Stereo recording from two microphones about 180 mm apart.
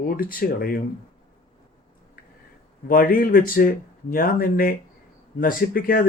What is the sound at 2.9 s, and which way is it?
Speech, 55° left (ahead or behind).